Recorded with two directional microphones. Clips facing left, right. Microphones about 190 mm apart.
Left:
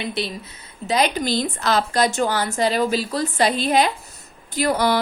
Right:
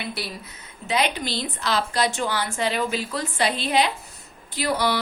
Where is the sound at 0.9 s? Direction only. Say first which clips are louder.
Left 4 dB; 40° left (ahead or behind).